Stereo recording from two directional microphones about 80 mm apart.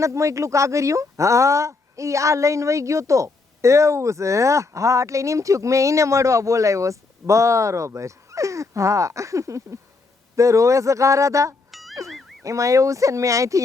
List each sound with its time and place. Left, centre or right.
0.0 s speech: right
11.7 s music: centre
12.0 s boing: centre
12.4 s speech: right